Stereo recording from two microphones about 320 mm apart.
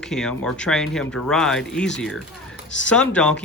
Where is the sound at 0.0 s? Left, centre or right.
Centre.